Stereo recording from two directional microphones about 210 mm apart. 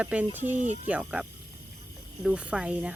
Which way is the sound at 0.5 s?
35° right (ahead or behind).